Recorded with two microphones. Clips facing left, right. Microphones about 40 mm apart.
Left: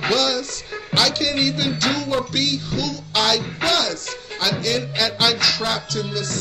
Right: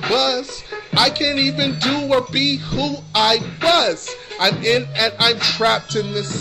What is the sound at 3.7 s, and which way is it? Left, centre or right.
Speech, right.